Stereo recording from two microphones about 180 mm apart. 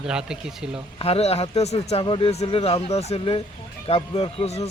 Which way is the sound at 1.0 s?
35° left (ahead or behind).